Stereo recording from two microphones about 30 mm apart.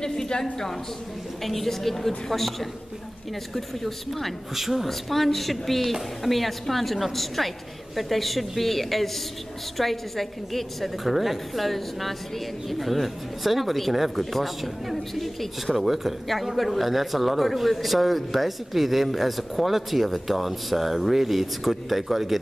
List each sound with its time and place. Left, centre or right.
0.0 s a woman's voice: left
1.4 s a man's voice: centre
4.6 s a woman's voice: centre
4.8 s a man's voice: centre